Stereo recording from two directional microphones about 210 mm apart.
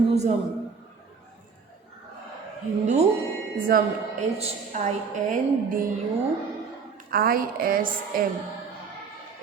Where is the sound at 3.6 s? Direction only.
40° right (ahead or behind).